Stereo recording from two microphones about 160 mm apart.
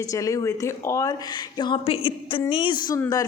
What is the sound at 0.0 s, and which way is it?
A woman's voice, 20° left (ahead or behind).